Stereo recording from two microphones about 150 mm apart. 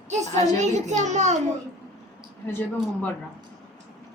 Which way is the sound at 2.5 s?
15° left (ahead or behind).